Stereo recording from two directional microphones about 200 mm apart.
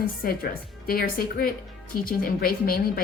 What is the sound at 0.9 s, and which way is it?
Speech, 45° left (ahead or behind).